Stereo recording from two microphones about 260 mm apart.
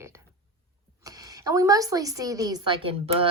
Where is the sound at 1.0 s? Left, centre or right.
Centre.